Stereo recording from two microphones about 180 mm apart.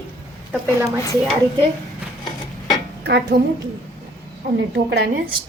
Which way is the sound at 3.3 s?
60° right (ahead or behind).